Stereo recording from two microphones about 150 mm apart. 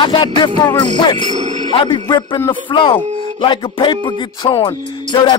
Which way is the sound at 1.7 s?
30° left (ahead or behind).